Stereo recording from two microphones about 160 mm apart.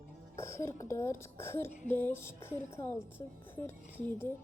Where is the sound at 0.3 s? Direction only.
15° left (ahead or behind).